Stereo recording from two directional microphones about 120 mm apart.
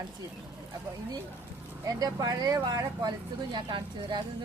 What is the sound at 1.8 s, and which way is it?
Speech, 30° right (ahead or behind).